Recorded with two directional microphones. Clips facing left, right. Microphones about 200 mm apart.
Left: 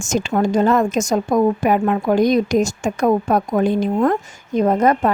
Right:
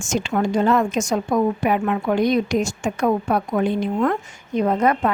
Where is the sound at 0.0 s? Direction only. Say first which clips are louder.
Left 3 dB; 45° left (ahead or behind).